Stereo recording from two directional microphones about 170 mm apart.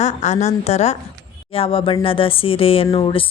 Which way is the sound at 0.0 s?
45° left (ahead or behind).